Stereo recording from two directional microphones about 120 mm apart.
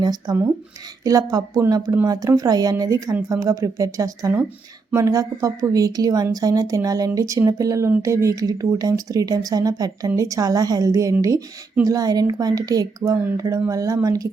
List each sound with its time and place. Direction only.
0.0 s a woman's voice: 35° right (ahead or behind)